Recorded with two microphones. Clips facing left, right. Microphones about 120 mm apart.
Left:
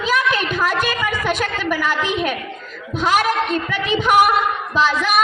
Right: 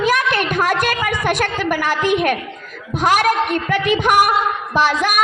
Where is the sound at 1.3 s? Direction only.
70° right (ahead or behind).